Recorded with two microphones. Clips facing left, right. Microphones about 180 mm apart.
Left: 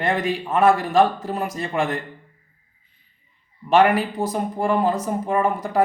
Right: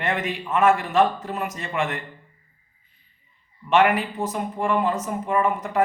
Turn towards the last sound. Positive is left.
turn(degrees=35)  # may be behind; listen again after turning